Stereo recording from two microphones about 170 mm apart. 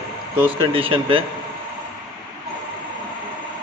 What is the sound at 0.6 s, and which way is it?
Speech, 30° right (ahead or behind).